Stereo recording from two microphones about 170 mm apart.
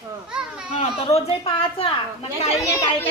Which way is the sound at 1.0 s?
35° left (ahead or behind).